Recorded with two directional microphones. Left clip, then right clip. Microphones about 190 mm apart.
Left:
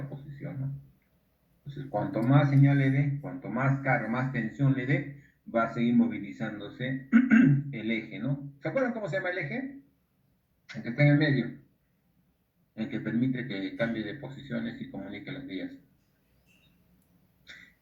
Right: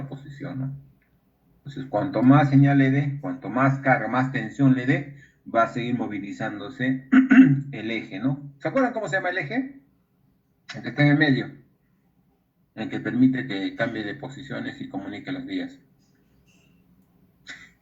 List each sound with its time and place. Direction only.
1.7 s speech: 45° right (ahead or behind)
11.0 s speech: 45° right (ahead or behind)
12.7 s speech: 45° right (ahead or behind)